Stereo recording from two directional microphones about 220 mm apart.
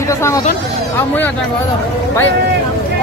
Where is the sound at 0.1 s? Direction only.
15° left (ahead or behind).